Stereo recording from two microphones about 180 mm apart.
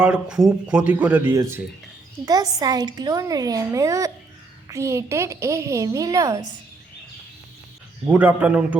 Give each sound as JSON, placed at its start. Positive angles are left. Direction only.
{"t": 0.0, "sound": "a woman's voice", "side_deg": -5}
{"t": 8.0, "sound": "a woman's voice", "side_deg": -10}